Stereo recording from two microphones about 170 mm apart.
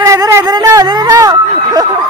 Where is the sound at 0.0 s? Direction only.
20° right (ahead or behind).